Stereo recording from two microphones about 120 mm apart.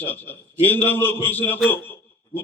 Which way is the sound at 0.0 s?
15° left (ahead or behind).